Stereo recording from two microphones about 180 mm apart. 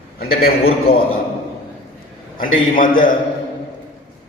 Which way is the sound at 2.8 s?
50° left (ahead or behind).